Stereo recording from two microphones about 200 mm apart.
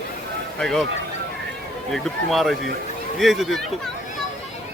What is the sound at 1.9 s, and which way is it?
Speech, centre (ahead or behind).